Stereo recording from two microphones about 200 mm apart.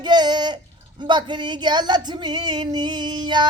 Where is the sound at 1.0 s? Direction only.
20° right (ahead or behind).